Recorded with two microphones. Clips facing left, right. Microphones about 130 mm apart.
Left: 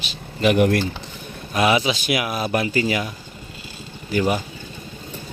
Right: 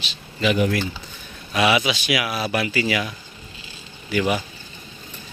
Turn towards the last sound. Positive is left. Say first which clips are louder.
# left 1 dB
turn(degrees=40)  # may be behind; listen again after turning